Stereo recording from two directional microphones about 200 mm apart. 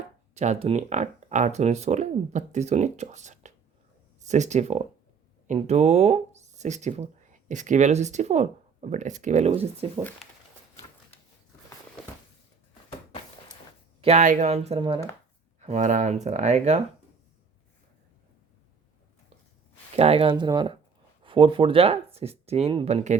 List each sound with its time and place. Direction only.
0.3 s speech: 35° right (ahead or behind)
14.0 s speech: 35° right (ahead or behind)
20.0 s speech: 30° right (ahead or behind)